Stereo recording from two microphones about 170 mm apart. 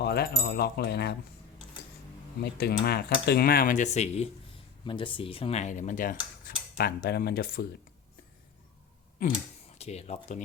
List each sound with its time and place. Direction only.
0.0 s speech: 70° left (ahead or behind)
2.4 s speech: 65° left (ahead or behind); by 4.3 s 40° left (ahead or behind)
4.9 s speech: 30° left (ahead or behind); by 6.1 s 50° left (ahead or behind)
6.7 s speech: 65° left (ahead or behind)
9.7 s speech: 40° left (ahead or behind)